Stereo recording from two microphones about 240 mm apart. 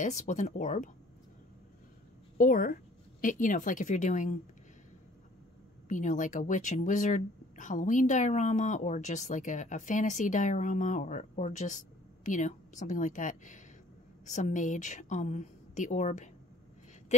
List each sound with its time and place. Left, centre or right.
0.0 s speech: left
2.3 s a woman's voice: left
5.9 s a woman's voice: left